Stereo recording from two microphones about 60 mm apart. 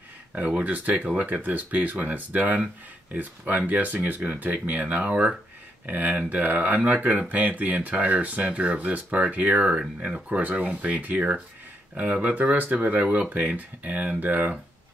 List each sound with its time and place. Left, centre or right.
0.6 s speech: right
10.4 s speech: right